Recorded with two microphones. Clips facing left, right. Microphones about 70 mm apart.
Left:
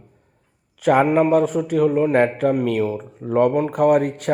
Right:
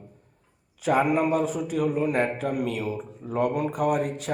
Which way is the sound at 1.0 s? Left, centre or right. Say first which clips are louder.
Left 7 dB; left.